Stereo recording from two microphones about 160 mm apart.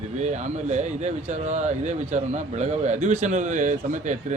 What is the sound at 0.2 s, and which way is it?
Speech, 45° right (ahead or behind).